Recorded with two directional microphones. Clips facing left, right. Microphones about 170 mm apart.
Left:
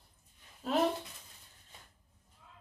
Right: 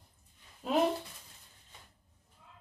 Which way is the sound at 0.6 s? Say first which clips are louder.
Right 1 dB; 15° right (ahead or behind).